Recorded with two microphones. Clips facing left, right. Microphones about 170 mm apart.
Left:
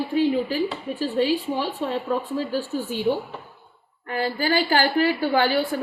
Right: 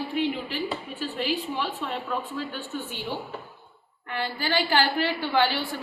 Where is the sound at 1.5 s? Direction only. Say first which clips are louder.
Left 5 dB; 35° left (ahead or behind).